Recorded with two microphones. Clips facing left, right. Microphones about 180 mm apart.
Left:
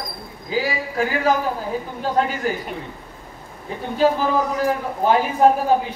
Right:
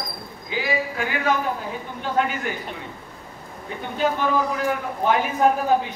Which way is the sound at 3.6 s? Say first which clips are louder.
Left 5 dB; 35° left (ahead or behind).